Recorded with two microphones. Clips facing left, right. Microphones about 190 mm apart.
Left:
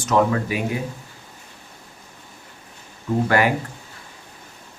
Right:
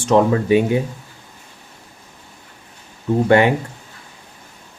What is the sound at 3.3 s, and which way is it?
Speech, 25° right (ahead or behind).